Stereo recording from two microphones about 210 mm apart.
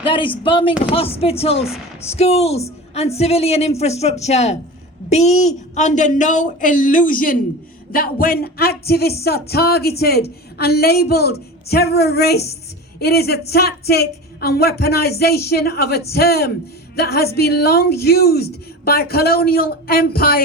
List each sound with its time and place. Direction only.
0.0 s speech: 25° left (ahead or behind); by 20.4 s 45° left (ahead or behind)